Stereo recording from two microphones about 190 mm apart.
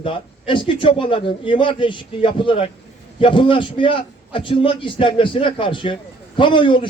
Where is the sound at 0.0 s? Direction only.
25° left (ahead or behind).